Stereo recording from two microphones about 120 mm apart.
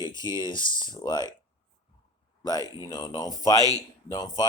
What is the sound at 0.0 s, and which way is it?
Speech, 40° left (ahead or behind).